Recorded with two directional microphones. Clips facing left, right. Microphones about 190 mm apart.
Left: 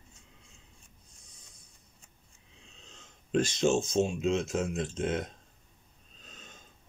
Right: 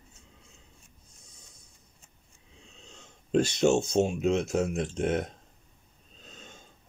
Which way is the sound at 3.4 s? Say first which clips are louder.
Right 3 dB; 65° right (ahead or behind).